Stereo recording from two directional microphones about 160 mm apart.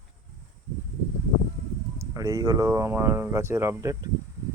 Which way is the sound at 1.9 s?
20° right (ahead or behind).